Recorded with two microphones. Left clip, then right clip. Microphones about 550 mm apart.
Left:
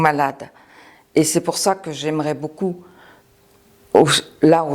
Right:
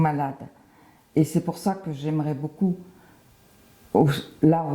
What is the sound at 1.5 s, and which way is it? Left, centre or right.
Speech, left.